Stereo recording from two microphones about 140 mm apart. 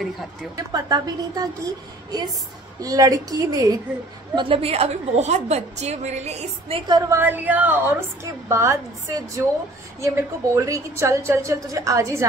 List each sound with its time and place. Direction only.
0.7 s a woman's voice: 30° right (ahead or behind)
4.4 s a woman's voice: 40° right (ahead or behind)
6.9 s a woman's voice: 25° right (ahead or behind)